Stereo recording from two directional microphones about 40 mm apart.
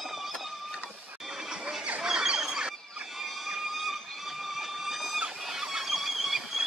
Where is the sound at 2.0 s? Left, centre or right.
Centre.